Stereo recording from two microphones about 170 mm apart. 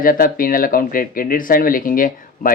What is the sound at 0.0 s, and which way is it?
A man's voice, 55° left (ahead or behind).